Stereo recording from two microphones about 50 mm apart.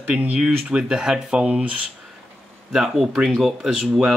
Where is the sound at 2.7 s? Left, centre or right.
Centre.